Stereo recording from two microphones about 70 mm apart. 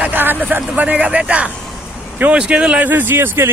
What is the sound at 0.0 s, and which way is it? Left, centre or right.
Speech, right.